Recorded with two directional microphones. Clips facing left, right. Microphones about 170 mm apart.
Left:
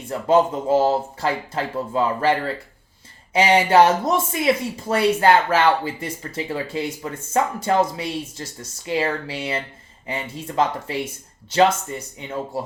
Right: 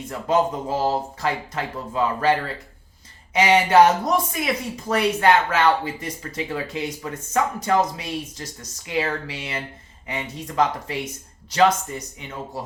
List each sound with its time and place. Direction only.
0.0 s speech: 30° left (ahead or behind)
3.3 s speech: 30° left (ahead or behind)